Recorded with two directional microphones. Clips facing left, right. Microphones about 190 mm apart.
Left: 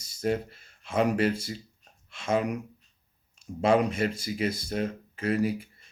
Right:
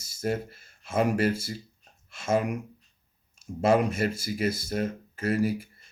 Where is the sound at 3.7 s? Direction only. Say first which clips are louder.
Even; 5° right (ahead or behind).